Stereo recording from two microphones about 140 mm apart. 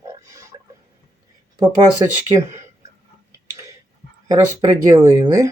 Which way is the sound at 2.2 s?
20° right (ahead or behind).